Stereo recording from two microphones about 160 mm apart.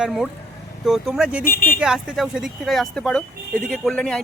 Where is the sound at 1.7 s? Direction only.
5° right (ahead or behind).